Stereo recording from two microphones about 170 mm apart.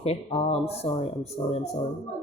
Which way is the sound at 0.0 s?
35° left (ahead or behind).